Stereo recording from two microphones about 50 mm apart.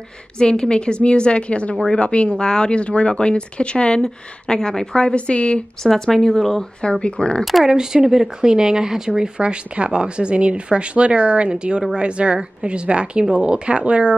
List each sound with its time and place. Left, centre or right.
0.4 s speech: centre
5.9 s speech: centre
6.8 s speech: centre
7.6 s speech: centre